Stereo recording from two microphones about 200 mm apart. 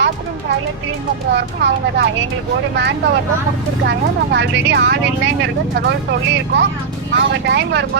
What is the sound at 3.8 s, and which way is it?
A woman's voice, 60° right (ahead or behind).